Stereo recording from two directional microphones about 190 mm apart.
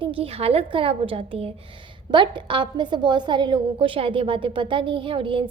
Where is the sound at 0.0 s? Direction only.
30° right (ahead or behind).